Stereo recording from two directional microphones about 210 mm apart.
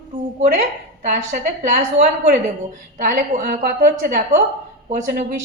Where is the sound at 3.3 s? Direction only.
40° right (ahead or behind).